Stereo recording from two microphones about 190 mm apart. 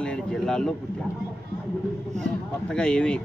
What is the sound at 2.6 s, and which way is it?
Speech, 5° left (ahead or behind).